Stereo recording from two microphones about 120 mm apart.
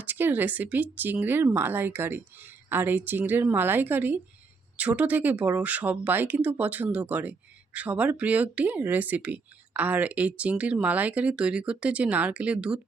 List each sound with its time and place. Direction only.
0.0 s speech: 15° right (ahead or behind)